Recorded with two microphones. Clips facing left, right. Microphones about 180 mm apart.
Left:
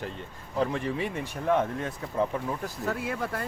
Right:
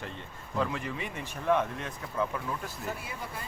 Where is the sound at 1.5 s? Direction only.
35° left (ahead or behind).